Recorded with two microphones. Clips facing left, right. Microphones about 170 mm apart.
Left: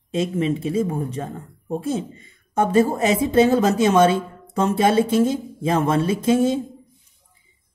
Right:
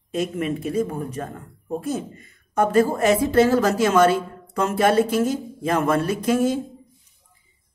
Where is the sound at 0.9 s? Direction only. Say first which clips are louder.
Left 2 dB; 25° left (ahead or behind).